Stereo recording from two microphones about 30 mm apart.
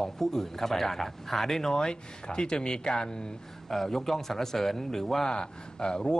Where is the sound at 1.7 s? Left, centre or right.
Left.